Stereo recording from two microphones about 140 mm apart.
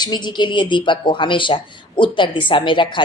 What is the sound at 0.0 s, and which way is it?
Speech, 30° left (ahead or behind).